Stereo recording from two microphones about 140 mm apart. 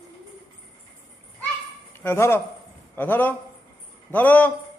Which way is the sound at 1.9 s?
15° left (ahead or behind).